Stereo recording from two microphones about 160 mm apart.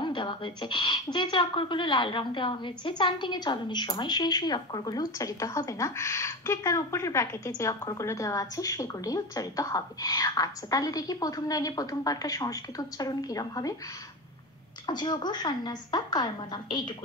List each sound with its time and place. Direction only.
0.0 s a woman's voice: 30° left (ahead or behind)
14.9 s a woman's voice: 25° left (ahead or behind)